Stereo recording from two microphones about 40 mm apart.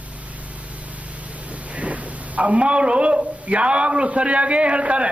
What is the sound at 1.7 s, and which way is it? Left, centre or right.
A man's voice, right.